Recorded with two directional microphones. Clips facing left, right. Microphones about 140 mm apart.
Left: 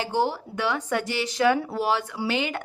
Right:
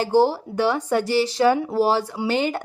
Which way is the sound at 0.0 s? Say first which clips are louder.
Right 7 dB; 35° right (ahead or behind).